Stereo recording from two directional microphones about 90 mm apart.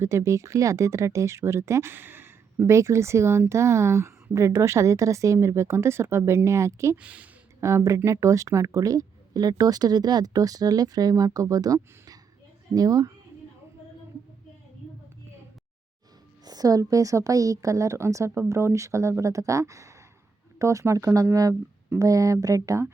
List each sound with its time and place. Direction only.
0.0 s a woman's voice: 30° right (ahead or behind)
6.9 s speech: 15° right (ahead or behind)
7.6 s speech: 35° right (ahead or behind)
16.5 s a woman's voice: 45° right (ahead or behind)